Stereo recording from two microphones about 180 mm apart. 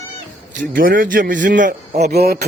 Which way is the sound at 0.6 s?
50° right (ahead or behind).